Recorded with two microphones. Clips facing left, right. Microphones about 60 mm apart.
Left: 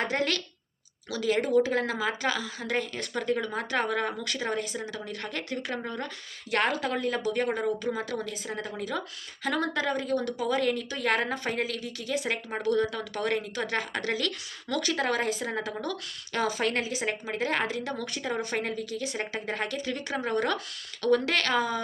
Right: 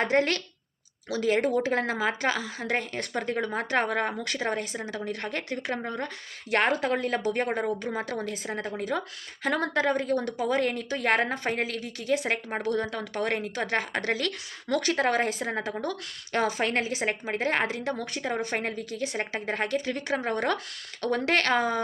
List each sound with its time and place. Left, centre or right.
0.0 s a woman's voice: right